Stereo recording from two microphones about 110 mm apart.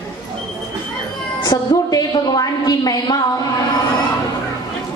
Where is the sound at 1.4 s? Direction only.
35° left (ahead or behind).